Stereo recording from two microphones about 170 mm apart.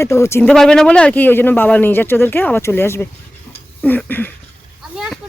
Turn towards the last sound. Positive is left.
turn(degrees=10)  # may be behind; listen again after turning